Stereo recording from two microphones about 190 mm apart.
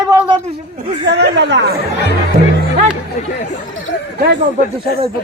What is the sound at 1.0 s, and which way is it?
Speech, 65° right (ahead or behind).